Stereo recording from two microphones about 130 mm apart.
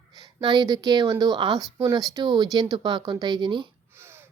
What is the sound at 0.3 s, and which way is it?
Speech, 35° right (ahead or behind).